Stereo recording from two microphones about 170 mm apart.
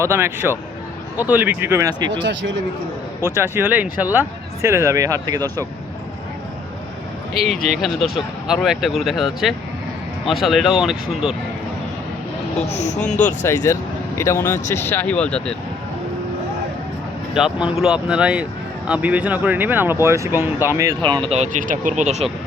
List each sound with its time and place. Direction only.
0.0 s speech: 15° right (ahead or behind)
2.2 s speech: 90° right
3.2 s speech: 15° right (ahead or behind)
7.4 s speech: centre (ahead or behind)
12.7 s speech: 40° left (ahead or behind)
13.2 s speech: 15° left (ahead or behind)
17.3 s speech: 5° right (ahead or behind)
21.0 s speech: 30° right (ahead or behind)